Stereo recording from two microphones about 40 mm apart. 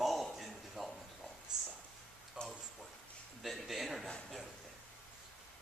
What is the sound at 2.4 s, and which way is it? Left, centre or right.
Speech, right.